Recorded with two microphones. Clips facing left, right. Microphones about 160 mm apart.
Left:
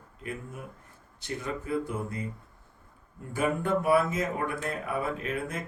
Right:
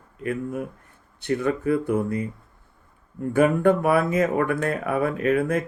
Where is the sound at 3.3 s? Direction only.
65° right (ahead or behind).